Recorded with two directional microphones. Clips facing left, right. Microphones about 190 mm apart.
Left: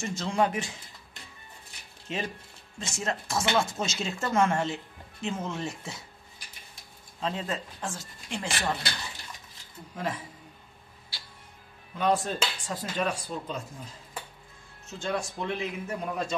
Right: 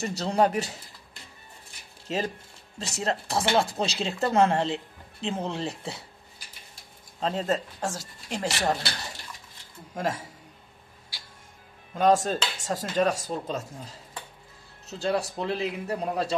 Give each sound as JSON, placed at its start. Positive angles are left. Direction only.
{"t": 0.0, "sound": "speech", "side_deg": -35}
{"t": 2.0, "sound": "speech", "side_deg": -40}
{"t": 7.2, "sound": "speech", "side_deg": -40}
{"t": 9.9, "sound": "speech", "side_deg": -45}
{"t": 11.9, "sound": "speech", "side_deg": -45}